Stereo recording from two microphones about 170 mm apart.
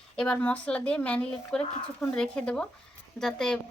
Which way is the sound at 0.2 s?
5° left (ahead or behind).